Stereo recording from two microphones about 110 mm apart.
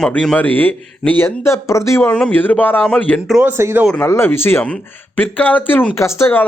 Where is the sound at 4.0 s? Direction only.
20° left (ahead or behind).